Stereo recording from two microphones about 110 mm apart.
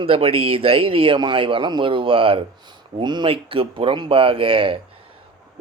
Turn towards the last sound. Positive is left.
turn(degrees=-55)  # may be behind; listen again after turning